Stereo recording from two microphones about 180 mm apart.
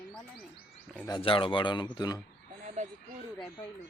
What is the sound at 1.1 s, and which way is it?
Speech, 30° left (ahead or behind).